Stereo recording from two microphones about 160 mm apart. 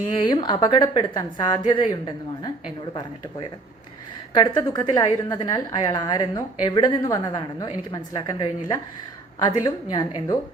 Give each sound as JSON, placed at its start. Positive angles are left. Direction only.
{"t": 0.3, "sound": "a woman's voice", "side_deg": 25}
{"t": 4.4, "sound": "a woman's voice", "side_deg": 25}